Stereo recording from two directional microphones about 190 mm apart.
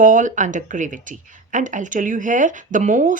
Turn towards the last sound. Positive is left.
turn(degrees=-45)  # may be behind; listen again after turning